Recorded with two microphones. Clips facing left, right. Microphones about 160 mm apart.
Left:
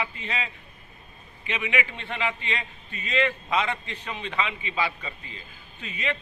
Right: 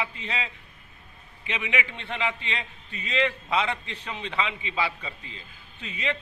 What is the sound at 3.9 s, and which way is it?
A man's voice, 25° right (ahead or behind).